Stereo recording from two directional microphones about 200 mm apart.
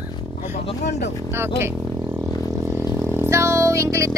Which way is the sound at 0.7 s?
35° left (ahead or behind).